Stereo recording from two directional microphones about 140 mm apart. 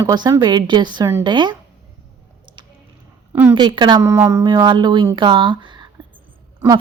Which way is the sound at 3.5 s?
35° right (ahead or behind).